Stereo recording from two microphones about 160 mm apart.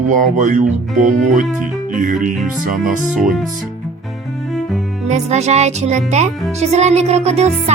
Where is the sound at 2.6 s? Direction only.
55° right (ahead or behind).